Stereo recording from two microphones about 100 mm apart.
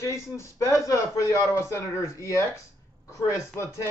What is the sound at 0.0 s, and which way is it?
A man's voice, 30° left (ahead or behind).